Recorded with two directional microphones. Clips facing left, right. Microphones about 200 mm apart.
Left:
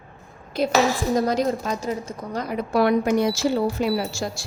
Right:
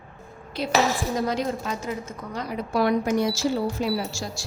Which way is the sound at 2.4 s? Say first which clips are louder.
Left 3 dB; 60° left (ahead or behind).